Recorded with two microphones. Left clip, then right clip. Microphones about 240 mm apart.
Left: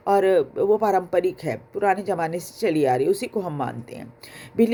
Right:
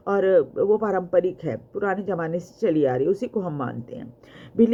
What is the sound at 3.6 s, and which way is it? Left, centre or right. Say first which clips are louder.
Speech: left 2 dB; left.